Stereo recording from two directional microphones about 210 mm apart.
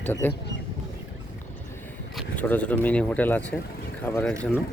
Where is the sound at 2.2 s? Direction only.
5° left (ahead or behind).